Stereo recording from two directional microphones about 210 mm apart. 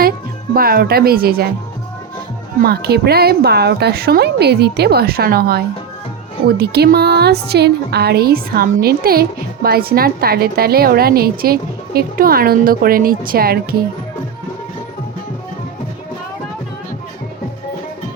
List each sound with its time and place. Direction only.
0.5 s a woman's voice: 45° right (ahead or behind)
2.6 s a woman's voice: 50° right (ahead or behind)